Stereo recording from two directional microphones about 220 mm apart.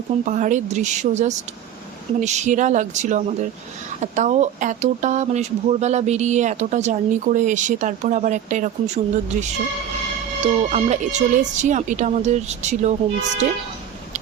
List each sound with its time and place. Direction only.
0.3 s speech: 35° right (ahead or behind)
10.4 s speech: 30° right (ahead or behind)